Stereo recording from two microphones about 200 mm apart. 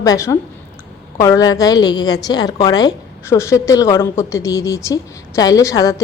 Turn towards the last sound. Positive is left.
turn(degrees=15)  # may be behind; listen again after turning